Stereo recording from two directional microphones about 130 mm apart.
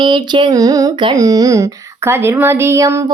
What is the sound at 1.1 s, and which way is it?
Speech, 30° right (ahead or behind).